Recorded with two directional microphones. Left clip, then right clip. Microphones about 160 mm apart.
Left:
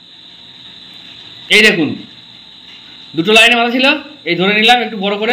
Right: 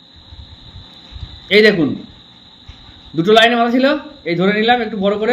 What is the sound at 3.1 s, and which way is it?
A man's voice, 25° right (ahead or behind).